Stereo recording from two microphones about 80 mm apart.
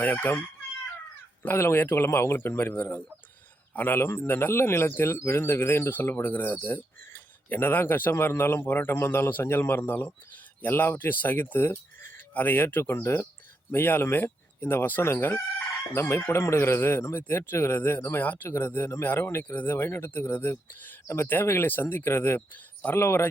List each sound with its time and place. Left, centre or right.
0.0 s chicken: left
1.4 s speech: left
3.8 s chicken: left
18.4 s speech: left
19.0 s chicken: left
23.0 s speech: left